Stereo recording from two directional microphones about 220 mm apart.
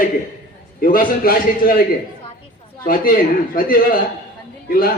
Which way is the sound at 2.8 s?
40° left (ahead or behind).